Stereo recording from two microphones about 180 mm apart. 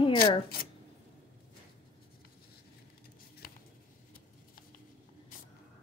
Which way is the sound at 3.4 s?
55° left (ahead or behind).